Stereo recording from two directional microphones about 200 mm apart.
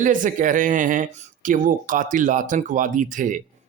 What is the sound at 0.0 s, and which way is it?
Speech, 40° right (ahead or behind).